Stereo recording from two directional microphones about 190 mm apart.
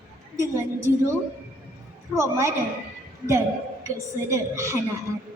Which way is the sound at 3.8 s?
15° right (ahead or behind).